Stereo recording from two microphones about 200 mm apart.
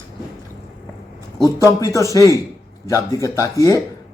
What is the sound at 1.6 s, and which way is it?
Speech, 15° left (ahead or behind).